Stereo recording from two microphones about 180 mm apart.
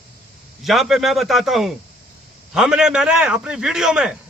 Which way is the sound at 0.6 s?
Centre (ahead or behind).